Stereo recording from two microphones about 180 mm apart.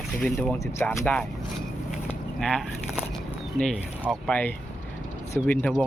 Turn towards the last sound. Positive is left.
turn(degrees=10)  # may be behind; listen again after turning